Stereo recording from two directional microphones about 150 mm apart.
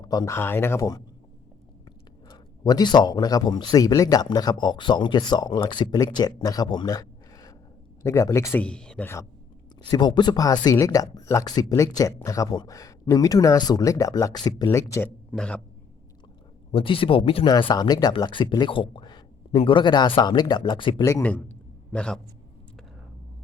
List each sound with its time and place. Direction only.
0.0 s speech: 25° left (ahead or behind)
2.3 s a man's voice: 25° left (ahead or behind)
9.7 s speech: 30° left (ahead or behind)
15.3 s a man's voice: 5° left (ahead or behind)
16.7 s speech: 35° left (ahead or behind)
21.0 s a man's voice: 15° left (ahead or behind)